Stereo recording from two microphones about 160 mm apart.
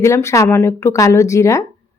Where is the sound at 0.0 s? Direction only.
20° left (ahead or behind).